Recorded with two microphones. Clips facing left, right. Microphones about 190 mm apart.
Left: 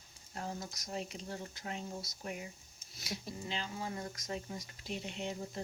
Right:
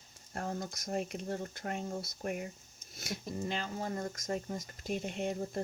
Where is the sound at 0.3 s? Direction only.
55° right (ahead or behind).